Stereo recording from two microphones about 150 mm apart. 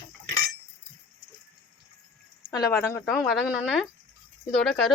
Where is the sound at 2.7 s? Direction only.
15° left (ahead or behind).